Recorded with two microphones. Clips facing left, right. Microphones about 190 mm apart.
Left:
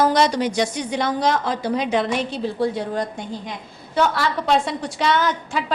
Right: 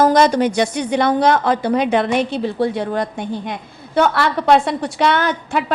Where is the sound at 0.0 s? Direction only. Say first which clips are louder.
Right 5 dB; 45° right (ahead or behind).